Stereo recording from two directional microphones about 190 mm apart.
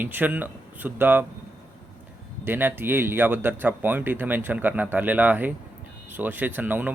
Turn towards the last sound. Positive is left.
turn(degrees=-10)  # may be behind; listen again after turning